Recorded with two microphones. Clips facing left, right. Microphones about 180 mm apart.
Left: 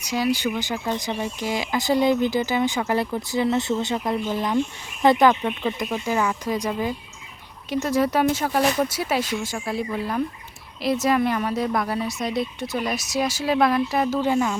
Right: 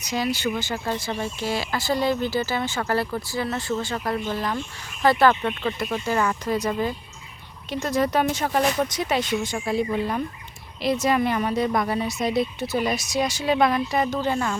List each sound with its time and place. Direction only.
0.0 s speech: 10° left (ahead or behind)